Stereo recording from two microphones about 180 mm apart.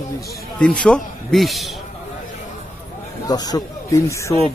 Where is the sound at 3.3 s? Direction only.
20° left (ahead or behind).